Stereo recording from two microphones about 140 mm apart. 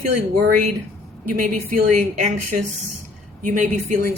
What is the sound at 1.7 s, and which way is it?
Speech, 75° right (ahead or behind).